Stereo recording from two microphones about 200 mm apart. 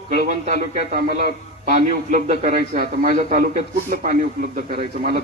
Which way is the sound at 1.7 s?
40° right (ahead or behind).